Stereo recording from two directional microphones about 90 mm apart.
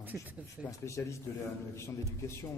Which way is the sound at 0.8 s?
35° left (ahead or behind).